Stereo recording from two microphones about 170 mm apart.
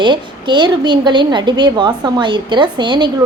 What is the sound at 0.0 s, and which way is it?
A woman's voice, 25° right (ahead or behind).